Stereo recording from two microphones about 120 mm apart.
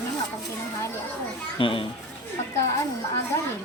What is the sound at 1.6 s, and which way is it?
Speech, 45° left (ahead or behind).